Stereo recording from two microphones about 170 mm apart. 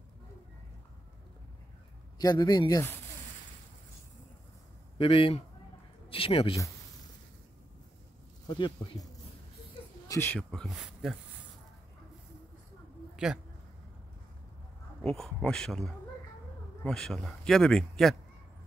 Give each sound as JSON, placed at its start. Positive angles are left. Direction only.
{"t": 2.1, "sound": "speech", "side_deg": 25}
{"t": 4.9, "sound": "a man's voice", "side_deg": 30}
{"t": 8.5, "sound": "speech", "side_deg": 25}
{"t": 10.0, "sound": "speech", "side_deg": 15}
{"t": 10.5, "sound": "speech", "side_deg": 0}
{"t": 13.1, "sound": "a sound", "side_deg": -5}
{"t": 15.0, "sound": "speech", "side_deg": 5}